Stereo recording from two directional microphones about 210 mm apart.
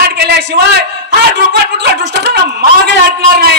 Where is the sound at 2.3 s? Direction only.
50° right (ahead or behind).